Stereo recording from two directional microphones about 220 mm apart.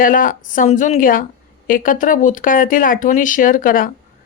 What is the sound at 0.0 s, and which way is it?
Speech, 40° left (ahead or behind).